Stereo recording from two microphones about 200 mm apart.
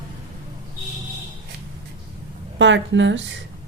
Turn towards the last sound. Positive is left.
turn(degrees=-65)  # may be behind; listen again after turning